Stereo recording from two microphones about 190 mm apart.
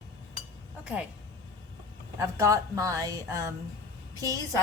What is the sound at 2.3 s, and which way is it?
Music, 15° right (ahead or behind).